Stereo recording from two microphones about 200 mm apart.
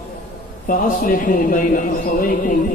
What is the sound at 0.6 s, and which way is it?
A man's voice, 45° left (ahead or behind).